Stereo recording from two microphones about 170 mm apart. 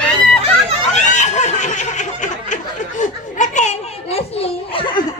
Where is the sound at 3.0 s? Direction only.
45° left (ahead or behind).